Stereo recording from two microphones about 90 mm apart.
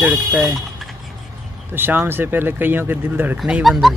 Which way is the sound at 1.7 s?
20° right (ahead or behind).